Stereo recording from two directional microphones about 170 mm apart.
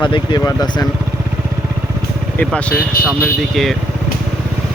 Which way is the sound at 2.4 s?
10° left (ahead or behind).